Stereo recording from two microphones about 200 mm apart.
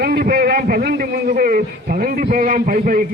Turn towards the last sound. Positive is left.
turn(degrees=-45)  # may be behind; listen again after turning